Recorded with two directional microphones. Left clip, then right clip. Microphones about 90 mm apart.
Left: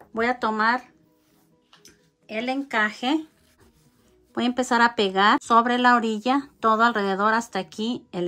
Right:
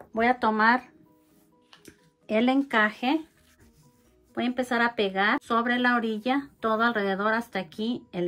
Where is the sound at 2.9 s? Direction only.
25° left (ahead or behind).